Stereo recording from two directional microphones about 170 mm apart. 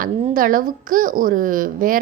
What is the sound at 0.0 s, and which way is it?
A child's voice, 55° right (ahead or behind).